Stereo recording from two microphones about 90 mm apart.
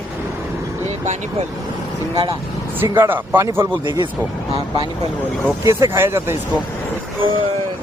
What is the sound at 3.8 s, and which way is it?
Speech, 55° right (ahead or behind).